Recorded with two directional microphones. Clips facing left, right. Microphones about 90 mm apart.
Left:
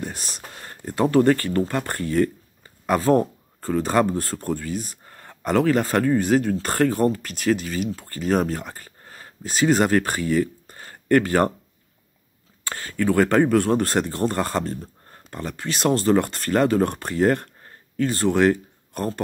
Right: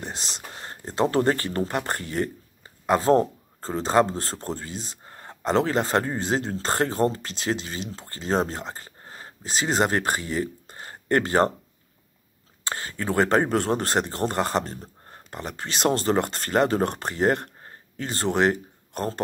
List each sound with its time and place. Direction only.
0.0 s speech: 25° right (ahead or behind)
12.6 s speech: 25° right (ahead or behind)